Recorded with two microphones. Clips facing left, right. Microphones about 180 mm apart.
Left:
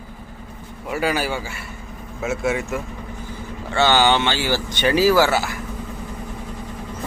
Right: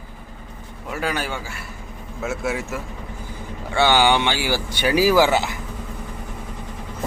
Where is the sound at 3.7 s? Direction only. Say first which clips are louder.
Even; 15° right (ahead or behind).